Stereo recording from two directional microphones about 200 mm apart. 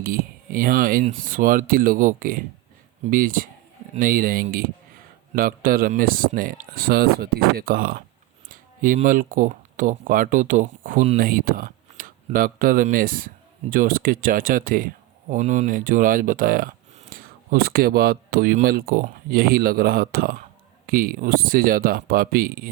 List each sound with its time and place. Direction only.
0.0 s speech: 45° right (ahead or behind)